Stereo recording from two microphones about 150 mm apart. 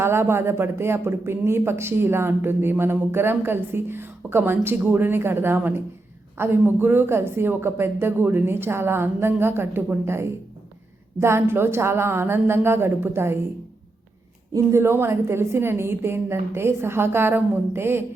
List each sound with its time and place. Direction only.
0.0 s speech: 15° right (ahead or behind)
14.5 s speech: 20° right (ahead or behind)